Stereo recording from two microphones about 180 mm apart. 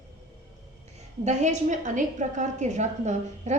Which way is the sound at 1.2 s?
40° right (ahead or behind).